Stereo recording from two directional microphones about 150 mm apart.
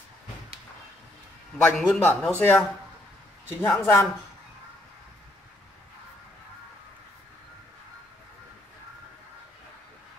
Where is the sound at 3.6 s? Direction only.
15° left (ahead or behind).